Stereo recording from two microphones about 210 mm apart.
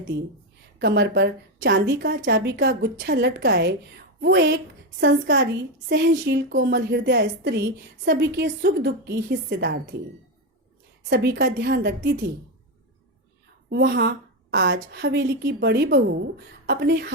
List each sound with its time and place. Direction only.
0.8 s a woman's voice: 55° right (ahead or behind)
11.1 s a woman's voice: 55° right (ahead or behind)
13.7 s a woman's voice: 50° right (ahead or behind)